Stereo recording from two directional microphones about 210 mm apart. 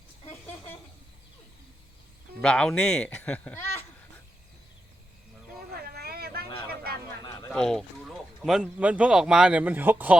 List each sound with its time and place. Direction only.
2.4 s speech: 5° left (ahead or behind)
5.8 s vehicle: 45° right (ahead or behind)
7.5 s speech: 5° left (ahead or behind)